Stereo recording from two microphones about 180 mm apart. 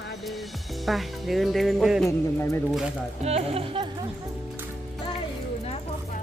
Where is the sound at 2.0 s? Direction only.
15° left (ahead or behind).